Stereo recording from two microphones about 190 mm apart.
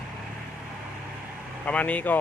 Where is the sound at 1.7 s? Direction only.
5° left (ahead or behind).